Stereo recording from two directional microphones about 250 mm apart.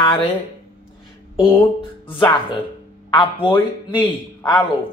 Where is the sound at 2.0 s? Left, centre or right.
Centre.